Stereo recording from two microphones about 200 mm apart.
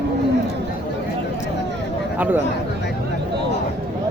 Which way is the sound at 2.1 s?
10° right (ahead or behind).